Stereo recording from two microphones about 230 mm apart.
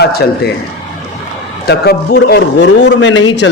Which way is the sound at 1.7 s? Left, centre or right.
Left.